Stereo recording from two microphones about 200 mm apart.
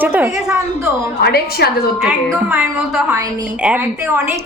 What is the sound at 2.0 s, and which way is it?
A woman's voice, 5° right (ahead or behind).